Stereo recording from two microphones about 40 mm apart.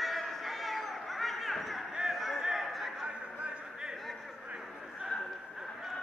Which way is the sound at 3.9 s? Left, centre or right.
Centre.